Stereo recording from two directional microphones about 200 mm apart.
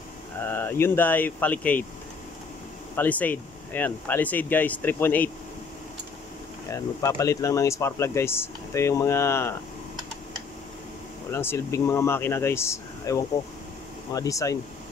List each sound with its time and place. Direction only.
0.4 s speech: 10° left (ahead or behind)
3.0 s speech: 10° left (ahead or behind)
6.7 s speech: 15° left (ahead or behind)
11.3 s speech: 15° left (ahead or behind)